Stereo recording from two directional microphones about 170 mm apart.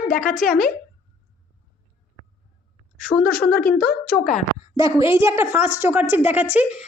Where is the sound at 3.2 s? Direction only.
65° left (ahead or behind).